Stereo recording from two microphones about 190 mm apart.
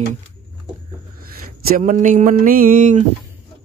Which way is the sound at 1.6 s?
45° right (ahead or behind).